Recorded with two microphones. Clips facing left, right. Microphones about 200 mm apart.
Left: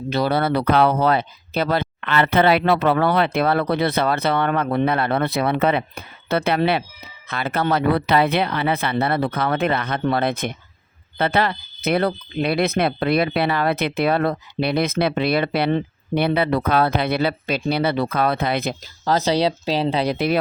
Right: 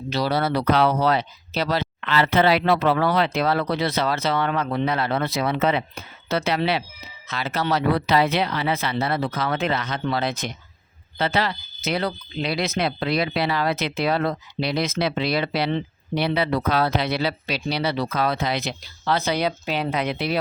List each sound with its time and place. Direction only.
0.1 s speech: 55° left (ahead or behind); by 20.1 s 30° left (ahead or behind)
20.1 s speech: 50° left (ahead or behind)